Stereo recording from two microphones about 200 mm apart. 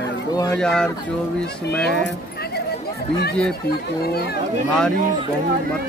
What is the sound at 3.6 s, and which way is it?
Speech, 50° left (ahead or behind).